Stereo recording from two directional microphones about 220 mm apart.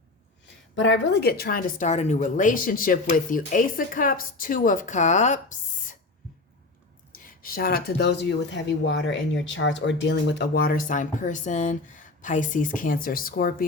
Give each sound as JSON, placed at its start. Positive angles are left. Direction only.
{"t": 0.8, "sound": "speech", "side_deg": 55}
{"t": 7.1, "sound": "speech", "side_deg": 40}